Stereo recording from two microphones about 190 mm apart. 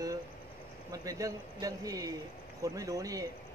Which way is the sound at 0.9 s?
20° right (ahead or behind).